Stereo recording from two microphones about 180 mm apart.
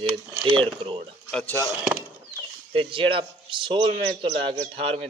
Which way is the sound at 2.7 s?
30° right (ahead or behind).